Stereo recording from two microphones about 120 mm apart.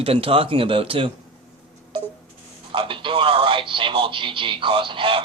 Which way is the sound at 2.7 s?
45° right (ahead or behind).